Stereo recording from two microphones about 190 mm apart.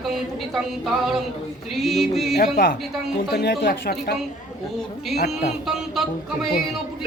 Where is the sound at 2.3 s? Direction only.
50° left (ahead or behind).